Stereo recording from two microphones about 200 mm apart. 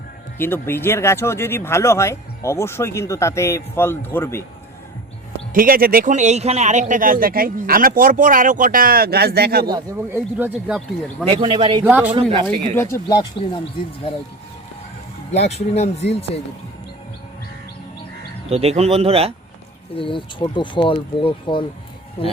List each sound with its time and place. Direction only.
0.3 s speech: 10° left (ahead or behind)
5.5 s speech: 45° right (ahead or behind)
9.6 s a man's voice: 20° right (ahead or behind)
10.3 s speech: 10° right (ahead or behind)
11.3 s a man's voice: 25° right (ahead or behind)
11.9 s speech: 10° right (ahead or behind)
12.1 s a man's voice: 25° right (ahead or behind)
12.7 s speech: 15° left (ahead or behind)
15.3 s speech: 35° left (ahead or behind)
18.5 s speech: 30° right (ahead or behind)
20.0 s speech: 25° left (ahead or behind)